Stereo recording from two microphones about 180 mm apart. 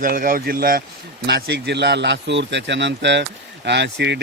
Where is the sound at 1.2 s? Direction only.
70° right (ahead or behind).